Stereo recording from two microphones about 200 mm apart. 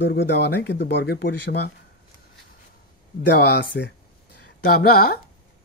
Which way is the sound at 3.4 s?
55° left (ahead or behind).